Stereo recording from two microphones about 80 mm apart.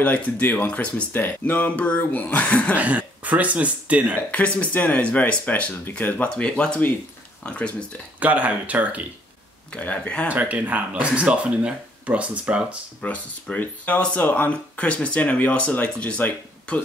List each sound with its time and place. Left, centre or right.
0.0 s speech: centre
2.8 s speech: centre
4.3 s speech: centre
8.2 s speech: centre
9.7 s speech: centre
10.2 s speech: centre
13.0 s speech: centre